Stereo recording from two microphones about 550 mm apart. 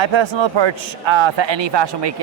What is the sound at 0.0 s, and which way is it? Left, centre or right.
Speech, right.